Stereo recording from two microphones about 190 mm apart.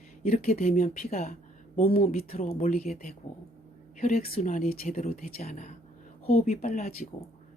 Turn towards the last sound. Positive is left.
turn(degrees=40)  # may be behind; listen again after turning